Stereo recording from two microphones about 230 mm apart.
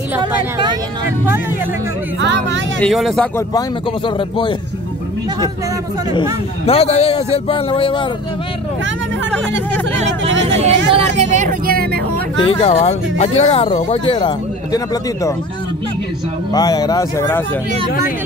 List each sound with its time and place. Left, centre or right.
0.2 s speech: centre
2.8 s speech: centre
6.6 s speech: left
10.4 s speech: right
12.4 s speech: left
16.5 s speech: centre